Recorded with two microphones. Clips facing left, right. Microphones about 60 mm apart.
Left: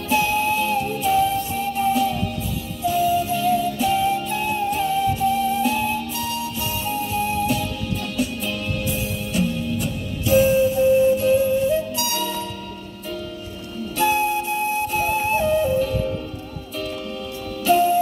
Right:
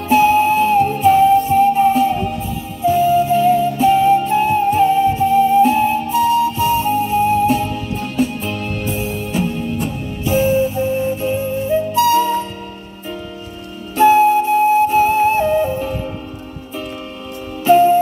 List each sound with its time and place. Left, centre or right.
0.1 s music: right
2.8 s flute: right
13.9 s music: right
17.6 s music: right